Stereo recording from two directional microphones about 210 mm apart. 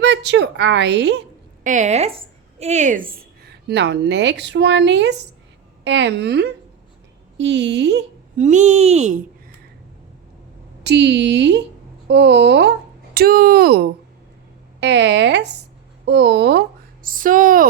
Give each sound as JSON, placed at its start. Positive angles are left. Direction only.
{"t": 0.0, "sound": "speech", "side_deg": -55}
{"t": 1.6, "sound": "a woman's voice", "side_deg": -35}
{"t": 8.4, "sound": "speech", "side_deg": -35}
{"t": 10.8, "sound": "speech", "side_deg": -55}
{"t": 14.8, "sound": "speech", "side_deg": -55}